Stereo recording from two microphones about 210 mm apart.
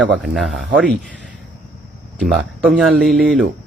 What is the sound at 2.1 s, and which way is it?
Speech, centre (ahead or behind).